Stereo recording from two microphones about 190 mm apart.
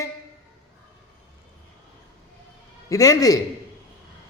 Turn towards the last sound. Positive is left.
turn(degrees=20)  # may be behind; listen again after turning